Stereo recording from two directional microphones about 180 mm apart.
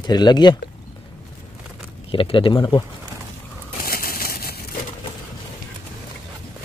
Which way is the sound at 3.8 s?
55° left (ahead or behind).